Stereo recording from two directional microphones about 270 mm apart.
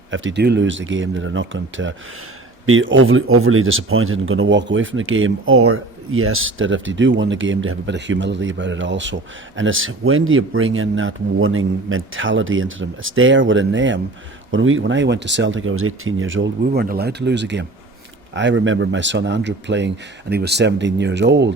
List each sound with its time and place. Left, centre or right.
0.1 s speech: right